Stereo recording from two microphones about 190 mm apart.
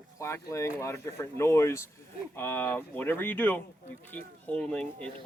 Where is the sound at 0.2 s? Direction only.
15° left (ahead or behind).